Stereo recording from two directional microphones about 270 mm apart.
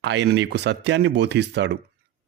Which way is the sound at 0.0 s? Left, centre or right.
Right.